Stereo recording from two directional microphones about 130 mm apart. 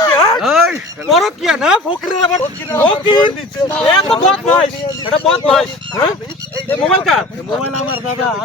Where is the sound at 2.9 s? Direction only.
40° left (ahead or behind).